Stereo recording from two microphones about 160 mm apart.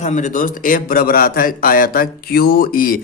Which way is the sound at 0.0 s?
50° left (ahead or behind).